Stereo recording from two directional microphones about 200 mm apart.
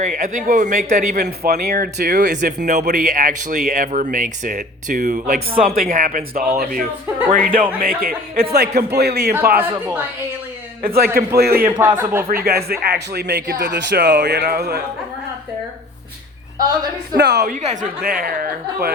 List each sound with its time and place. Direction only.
0.0 s speech: 40° right (ahead or behind)
2.6 s speech: 40° right (ahead or behind)
9.6 s a man's voice: 10° right (ahead or behind)
10.8 s speech: 50° right (ahead or behind)
11.6 s a man's voice: 10° right (ahead or behind)
12.3 s speech: 50° right (ahead or behind)
17.2 s speech: 55° right (ahead or behind)
17.7 s speech: 40° right (ahead or behind)